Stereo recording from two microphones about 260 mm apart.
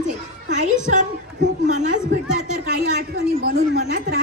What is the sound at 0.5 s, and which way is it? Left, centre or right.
Music, right.